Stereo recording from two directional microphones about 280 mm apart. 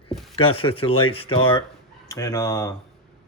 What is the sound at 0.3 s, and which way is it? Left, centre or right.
Speech, centre.